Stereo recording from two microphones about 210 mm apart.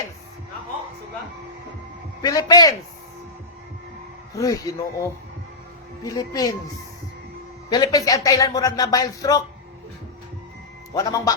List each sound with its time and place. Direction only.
2.2 s speech: 15° left (ahead or behind)
4.4 s speech: 15° left (ahead or behind)
7.7 s speech: 20° left (ahead or behind)
10.9 s speech: 15° left (ahead or behind)